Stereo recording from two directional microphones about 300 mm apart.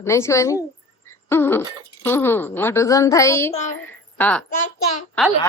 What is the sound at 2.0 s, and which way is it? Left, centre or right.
Speech, centre.